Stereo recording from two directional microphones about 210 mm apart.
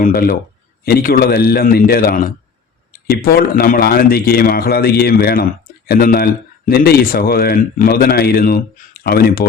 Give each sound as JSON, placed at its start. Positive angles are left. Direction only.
{"t": 0.0, "sound": "a man's voice", "side_deg": 45}